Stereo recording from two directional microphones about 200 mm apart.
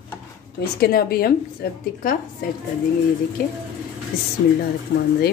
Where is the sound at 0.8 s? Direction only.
50° left (ahead or behind).